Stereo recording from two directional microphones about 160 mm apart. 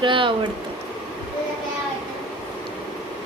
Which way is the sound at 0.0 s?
30° right (ahead or behind).